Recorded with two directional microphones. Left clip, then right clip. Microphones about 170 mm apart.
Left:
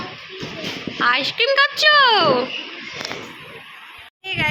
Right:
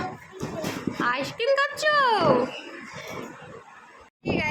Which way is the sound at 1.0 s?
Centre (ahead or behind).